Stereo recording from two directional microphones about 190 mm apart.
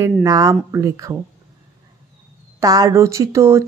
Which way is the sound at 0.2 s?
15° right (ahead or behind).